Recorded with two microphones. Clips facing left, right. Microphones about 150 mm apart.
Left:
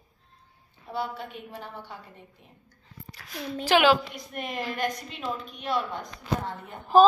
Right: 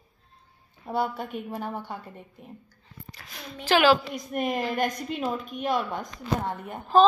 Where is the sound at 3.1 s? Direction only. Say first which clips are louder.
Right 1 dB; centre (ahead or behind).